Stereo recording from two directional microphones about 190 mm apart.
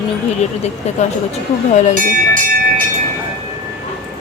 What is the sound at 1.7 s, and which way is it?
Speech, 40° left (ahead or behind).